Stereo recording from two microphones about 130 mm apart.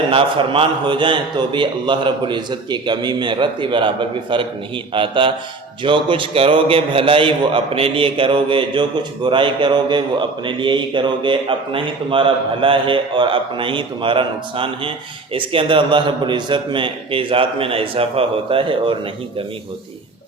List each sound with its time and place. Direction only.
0.1 s a man's voice: 45° right (ahead or behind)